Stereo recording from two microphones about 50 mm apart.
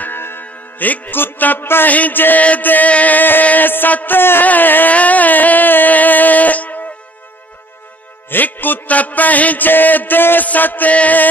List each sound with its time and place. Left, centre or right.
0.0 s music: left
1.9 s music: left
8.3 s music: left